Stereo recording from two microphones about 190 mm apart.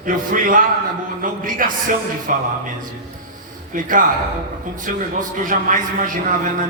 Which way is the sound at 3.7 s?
45° right (ahead or behind).